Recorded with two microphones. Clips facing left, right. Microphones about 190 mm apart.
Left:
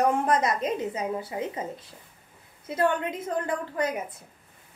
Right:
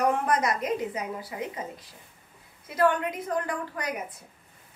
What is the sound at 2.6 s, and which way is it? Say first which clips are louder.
Speech: right 1 dB; 25° left (ahead or behind).